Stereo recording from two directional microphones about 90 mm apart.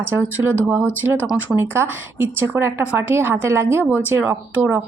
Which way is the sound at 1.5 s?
25° right (ahead or behind).